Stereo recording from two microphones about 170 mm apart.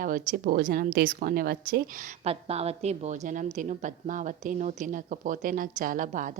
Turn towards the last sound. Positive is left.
turn(degrees=-50)  # may be behind; listen again after turning